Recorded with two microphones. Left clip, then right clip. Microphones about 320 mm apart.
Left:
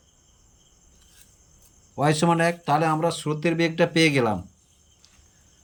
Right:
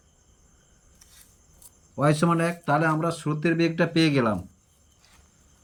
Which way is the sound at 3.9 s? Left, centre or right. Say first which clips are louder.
Left 2 dB; left.